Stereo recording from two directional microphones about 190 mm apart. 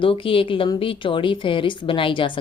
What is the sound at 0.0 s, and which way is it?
A woman's voice, 30° left (ahead or behind).